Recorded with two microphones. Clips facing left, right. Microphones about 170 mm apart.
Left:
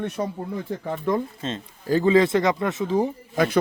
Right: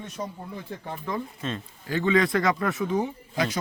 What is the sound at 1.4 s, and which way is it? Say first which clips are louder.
Speech: left 4 dB; 30° left (ahead or behind).